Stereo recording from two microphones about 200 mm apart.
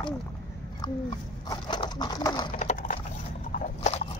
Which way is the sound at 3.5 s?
40° left (ahead or behind).